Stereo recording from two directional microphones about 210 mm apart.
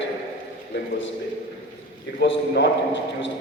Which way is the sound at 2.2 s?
55° left (ahead or behind).